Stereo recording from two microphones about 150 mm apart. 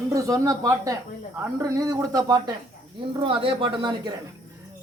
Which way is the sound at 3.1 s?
35° right (ahead or behind).